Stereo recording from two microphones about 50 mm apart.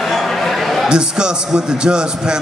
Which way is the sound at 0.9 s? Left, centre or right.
Centre.